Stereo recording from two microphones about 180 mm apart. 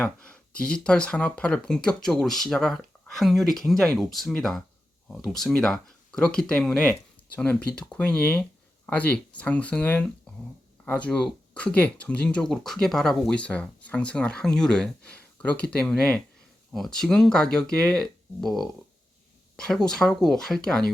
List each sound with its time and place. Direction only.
0.0 s speech: 5° left (ahead or behind)